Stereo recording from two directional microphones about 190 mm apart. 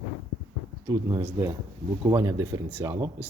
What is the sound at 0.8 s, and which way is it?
Speech, 20° right (ahead or behind).